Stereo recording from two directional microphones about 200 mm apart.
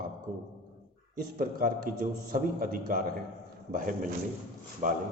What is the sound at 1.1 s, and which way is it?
A man's voice, 45° right (ahead or behind).